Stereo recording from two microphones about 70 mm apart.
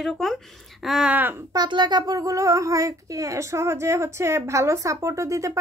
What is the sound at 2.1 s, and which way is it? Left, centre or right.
Speech, right.